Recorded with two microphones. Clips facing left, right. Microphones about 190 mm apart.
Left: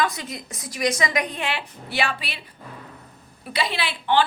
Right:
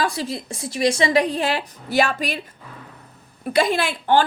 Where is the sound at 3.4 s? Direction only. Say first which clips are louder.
Right 8 dB; 45° right (ahead or behind).